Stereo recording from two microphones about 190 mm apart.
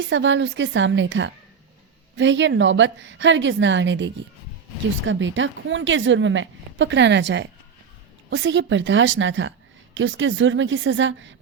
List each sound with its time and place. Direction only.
0.0 s a woman's voice: 75° right (ahead or behind)